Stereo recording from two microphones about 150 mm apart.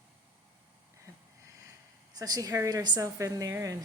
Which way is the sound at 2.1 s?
25° right (ahead or behind).